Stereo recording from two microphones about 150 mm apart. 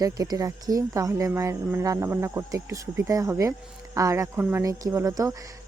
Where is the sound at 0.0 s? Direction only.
25° right (ahead or behind).